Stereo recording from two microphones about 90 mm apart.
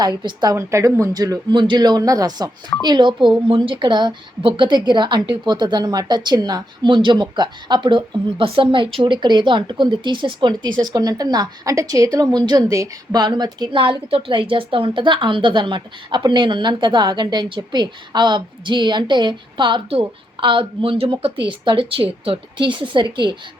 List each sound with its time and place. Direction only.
0.0 s a woman's voice: 55° right (ahead or behind)
0.5 s speech: 35° right (ahead or behind)
1.5 s speech: 60° right (ahead or behind); by 2.5 s 45° right (ahead or behind)
2.8 s a woman's voice: 55° right (ahead or behind); by 13.1 s 35° right (ahead or behind)
13.1 s speech: 55° right (ahead or behind)
13.7 s a woman's voice: 75° right (ahead or behind)